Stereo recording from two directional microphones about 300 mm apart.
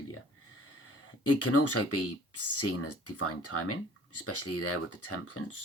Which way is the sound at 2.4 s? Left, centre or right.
Left.